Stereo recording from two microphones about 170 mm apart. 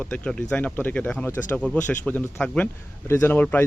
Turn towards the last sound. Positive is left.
turn(degrees=10)  # may be behind; listen again after turning